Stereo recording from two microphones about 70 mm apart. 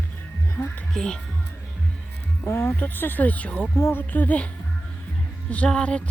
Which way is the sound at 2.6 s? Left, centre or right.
Left.